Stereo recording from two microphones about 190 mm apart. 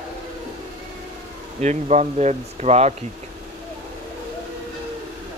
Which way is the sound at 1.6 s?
35° right (ahead or behind).